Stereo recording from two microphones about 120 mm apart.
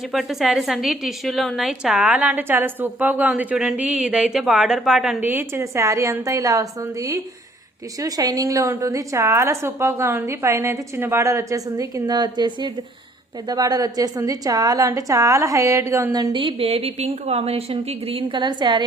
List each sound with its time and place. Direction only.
0.1 s a woman's voice: centre (ahead or behind)
5.2 s a woman's voice: 15° right (ahead or behind)
16.1 s a woman's voice: 40° right (ahead or behind)